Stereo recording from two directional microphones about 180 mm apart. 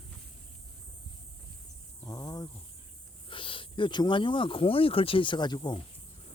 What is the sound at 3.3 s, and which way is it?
Speech, 30° left (ahead or behind).